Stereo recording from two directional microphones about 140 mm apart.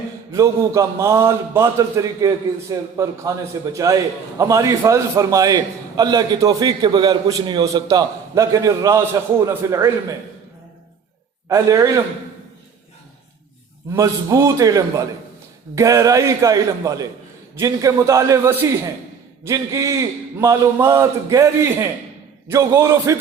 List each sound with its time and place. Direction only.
0.3 s a man's voice: 20° right (ahead or behind)
11.4 s a man's voice: 25° right (ahead or behind)
13.9 s a man's voice: 20° right (ahead or behind)